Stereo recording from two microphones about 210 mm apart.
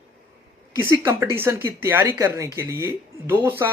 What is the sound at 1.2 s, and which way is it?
Speech, 10° right (ahead or behind).